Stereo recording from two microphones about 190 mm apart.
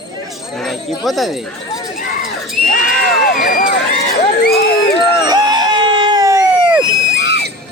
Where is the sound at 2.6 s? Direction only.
50° left (ahead or behind).